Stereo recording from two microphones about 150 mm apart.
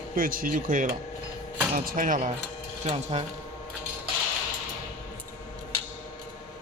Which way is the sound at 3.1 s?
45° right (ahead or behind).